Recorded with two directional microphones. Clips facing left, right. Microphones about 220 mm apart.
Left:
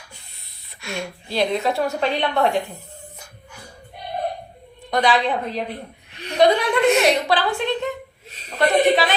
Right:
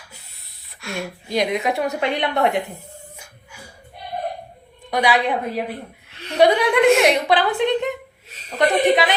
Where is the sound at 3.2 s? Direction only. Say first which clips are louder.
Left 1 dB; 10° right (ahead or behind).